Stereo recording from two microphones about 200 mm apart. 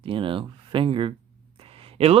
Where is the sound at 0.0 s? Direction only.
25° right (ahead or behind).